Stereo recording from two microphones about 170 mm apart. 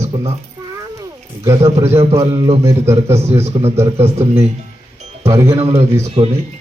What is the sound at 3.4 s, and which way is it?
A man's voice, 40° right (ahead or behind).